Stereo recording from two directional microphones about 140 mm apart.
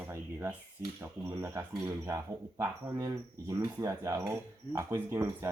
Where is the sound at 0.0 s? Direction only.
15° right (ahead or behind).